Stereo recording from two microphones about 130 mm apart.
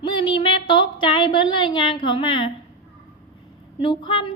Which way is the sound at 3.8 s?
40° left (ahead or behind).